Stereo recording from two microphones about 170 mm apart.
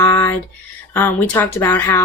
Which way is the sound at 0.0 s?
20° left (ahead or behind).